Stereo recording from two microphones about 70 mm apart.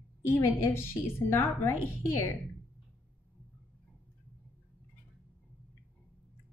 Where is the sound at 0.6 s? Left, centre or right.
Left.